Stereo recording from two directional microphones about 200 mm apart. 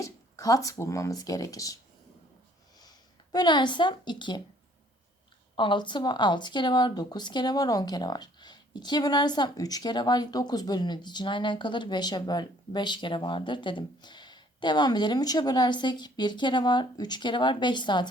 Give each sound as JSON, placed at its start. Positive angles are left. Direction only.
{"t": 0.0, "sound": "speech", "side_deg": 15}
{"t": 3.3, "sound": "speech", "side_deg": 20}
{"t": 5.5, "sound": "speech", "side_deg": 25}